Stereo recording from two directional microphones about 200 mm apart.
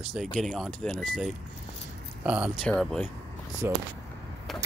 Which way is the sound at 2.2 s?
5° right (ahead or behind).